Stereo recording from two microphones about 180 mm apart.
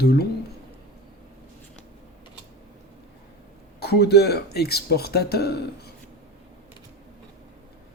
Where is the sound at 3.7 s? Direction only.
65° left (ahead or behind).